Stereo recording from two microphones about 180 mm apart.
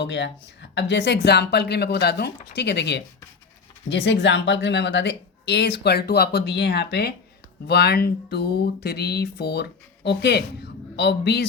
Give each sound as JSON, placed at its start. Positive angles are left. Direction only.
{"t": 0.0, "sound": "speech", "side_deg": 80}
{"t": 3.8, "sound": "speech", "side_deg": 85}